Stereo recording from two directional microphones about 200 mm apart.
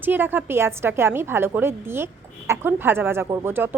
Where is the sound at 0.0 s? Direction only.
10° right (ahead or behind).